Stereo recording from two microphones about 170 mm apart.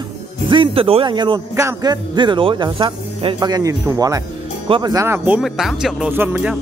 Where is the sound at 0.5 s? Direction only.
30° right (ahead or behind); by 6.5 s 10° right (ahead or behind).